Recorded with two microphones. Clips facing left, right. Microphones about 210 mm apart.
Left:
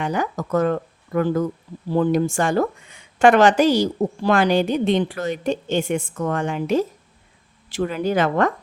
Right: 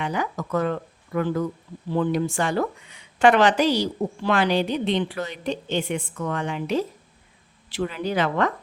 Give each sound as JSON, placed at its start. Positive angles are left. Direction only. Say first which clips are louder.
{"t": 0.0, "sound": "speech", "louder": "left 3 dB", "side_deg": 45}